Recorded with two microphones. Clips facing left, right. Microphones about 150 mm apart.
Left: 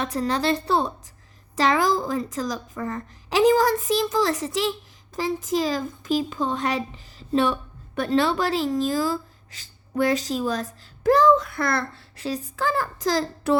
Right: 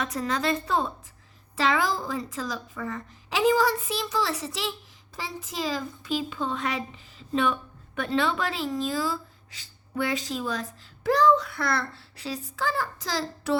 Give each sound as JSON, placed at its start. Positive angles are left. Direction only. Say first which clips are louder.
{"t": 0.0, "sound": "a woman's voice", "louder": "left 4 dB", "side_deg": 30}